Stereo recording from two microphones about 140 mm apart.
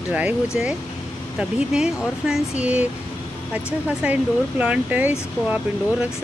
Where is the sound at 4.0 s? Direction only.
10° right (ahead or behind).